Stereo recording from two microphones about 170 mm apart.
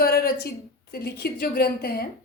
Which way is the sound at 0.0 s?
65° left (ahead or behind).